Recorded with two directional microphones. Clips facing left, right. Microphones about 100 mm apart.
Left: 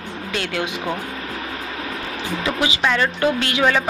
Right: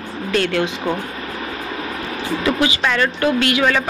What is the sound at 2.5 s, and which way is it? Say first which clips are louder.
Speech: right 2 dB; 20° left (ahead or behind).